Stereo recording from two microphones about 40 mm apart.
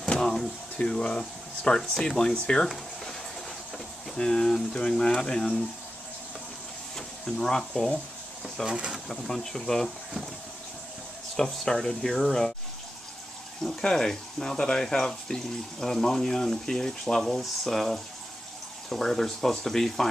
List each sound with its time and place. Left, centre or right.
0.1 s a sound: centre
0.7 s speech: left
1.8 s speech: centre
2.1 s speech: left
4.2 s speech: centre
7.0 s speech: centre
8.7 s speech: right
9.1 s speech: centre
11.3 s speech: centre
13.7 s speech: centre